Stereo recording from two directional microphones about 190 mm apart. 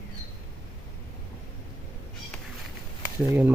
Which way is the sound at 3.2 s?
10° right (ahead or behind).